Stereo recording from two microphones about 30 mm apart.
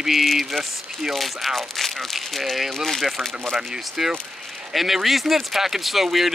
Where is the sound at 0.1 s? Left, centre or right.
Centre.